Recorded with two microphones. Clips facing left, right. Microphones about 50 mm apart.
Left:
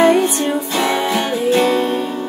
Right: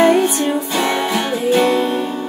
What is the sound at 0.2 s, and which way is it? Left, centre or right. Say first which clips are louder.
Music: right 1 dB; centre.